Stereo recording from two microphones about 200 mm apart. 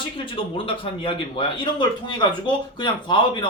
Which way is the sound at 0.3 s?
25° left (ahead or behind).